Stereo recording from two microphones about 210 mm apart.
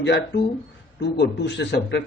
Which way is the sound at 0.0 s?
55° left (ahead or behind).